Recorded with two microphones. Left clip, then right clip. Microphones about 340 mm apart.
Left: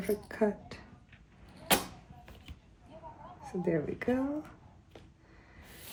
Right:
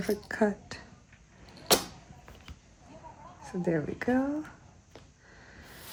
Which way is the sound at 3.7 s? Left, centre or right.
Right.